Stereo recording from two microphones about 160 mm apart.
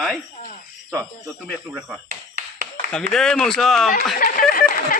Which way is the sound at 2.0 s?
75° right (ahead or behind).